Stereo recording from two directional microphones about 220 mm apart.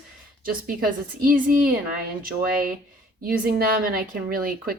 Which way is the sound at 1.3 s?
40° right (ahead or behind).